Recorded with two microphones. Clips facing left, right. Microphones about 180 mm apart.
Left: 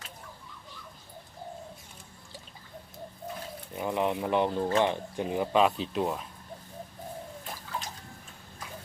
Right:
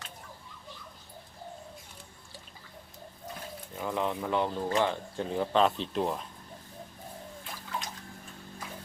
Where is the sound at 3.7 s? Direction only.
15° left (ahead or behind); by 6.2 s centre (ahead or behind).